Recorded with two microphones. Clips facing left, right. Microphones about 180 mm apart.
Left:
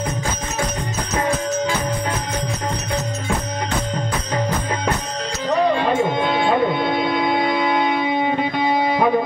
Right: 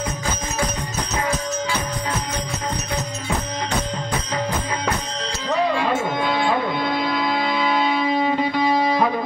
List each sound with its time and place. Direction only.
8.0 s music: 25° left (ahead or behind)